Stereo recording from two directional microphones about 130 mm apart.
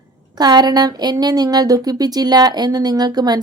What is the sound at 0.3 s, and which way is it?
Speech, 30° right (ahead or behind).